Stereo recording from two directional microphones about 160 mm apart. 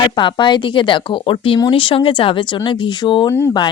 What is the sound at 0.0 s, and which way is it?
A woman's voice, 30° left (ahead or behind).